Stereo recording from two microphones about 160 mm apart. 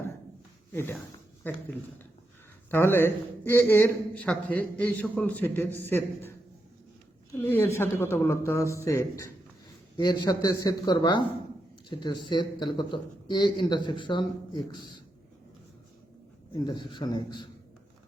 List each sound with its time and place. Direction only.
0.7 s speech: 15° left (ahead or behind)
2.6 s speech: 15° left (ahead or behind)
7.3 s speech: 15° left (ahead or behind)
16.6 s speech: 30° left (ahead or behind)